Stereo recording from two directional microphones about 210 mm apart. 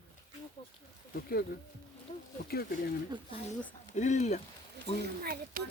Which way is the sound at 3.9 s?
35° left (ahead or behind).